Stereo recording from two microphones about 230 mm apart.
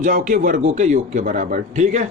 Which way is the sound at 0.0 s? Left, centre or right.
Right.